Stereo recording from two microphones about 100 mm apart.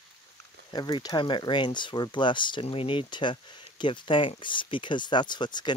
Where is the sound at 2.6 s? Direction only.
65° left (ahead or behind).